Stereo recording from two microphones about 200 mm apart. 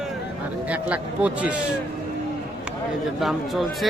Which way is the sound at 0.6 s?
5° right (ahead or behind).